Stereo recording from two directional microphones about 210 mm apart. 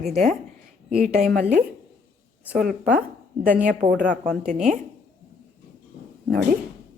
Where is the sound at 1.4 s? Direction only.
40° right (ahead or behind).